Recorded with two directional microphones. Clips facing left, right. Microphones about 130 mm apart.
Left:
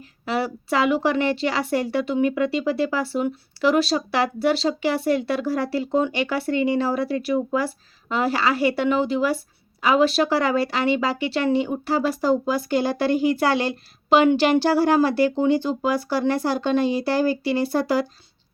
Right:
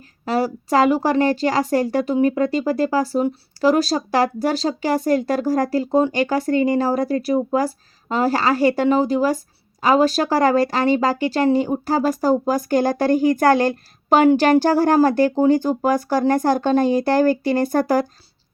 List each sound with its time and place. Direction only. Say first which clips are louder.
0.3 s speech: right 4 dB; 40° right (ahead or behind)